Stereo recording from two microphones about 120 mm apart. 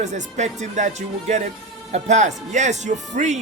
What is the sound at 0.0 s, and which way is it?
Speech, 75° right (ahead or behind).